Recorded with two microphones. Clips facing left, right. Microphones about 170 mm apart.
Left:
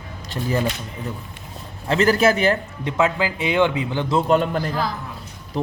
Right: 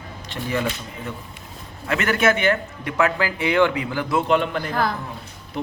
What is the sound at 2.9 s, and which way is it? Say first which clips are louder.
A man's voice: left 1 dB; 20° left (ahead or behind).